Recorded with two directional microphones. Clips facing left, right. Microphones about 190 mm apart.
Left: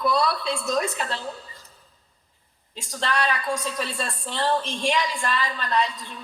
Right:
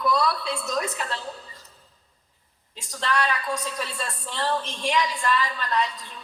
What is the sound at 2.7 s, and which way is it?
A woman's voice, 30° left (ahead or behind).